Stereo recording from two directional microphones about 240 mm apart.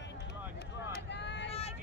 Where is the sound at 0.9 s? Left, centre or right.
Left.